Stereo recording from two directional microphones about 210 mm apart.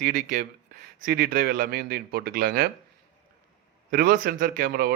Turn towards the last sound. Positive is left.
turn(degrees=-45)  # may be behind; listen again after turning